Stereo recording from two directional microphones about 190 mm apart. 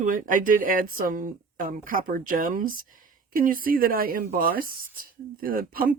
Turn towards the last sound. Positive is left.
turn(degrees=-50)  # may be behind; listen again after turning